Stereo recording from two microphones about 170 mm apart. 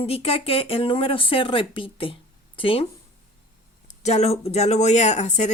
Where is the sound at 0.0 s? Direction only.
35° left (ahead or behind).